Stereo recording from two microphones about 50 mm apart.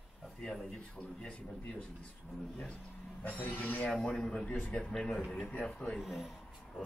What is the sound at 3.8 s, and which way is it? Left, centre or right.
Speech, centre.